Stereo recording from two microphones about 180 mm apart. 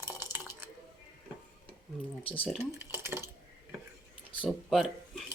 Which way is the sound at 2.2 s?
30° left (ahead or behind).